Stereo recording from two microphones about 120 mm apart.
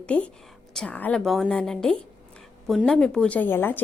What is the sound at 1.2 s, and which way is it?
A woman's voice, centre (ahead or behind).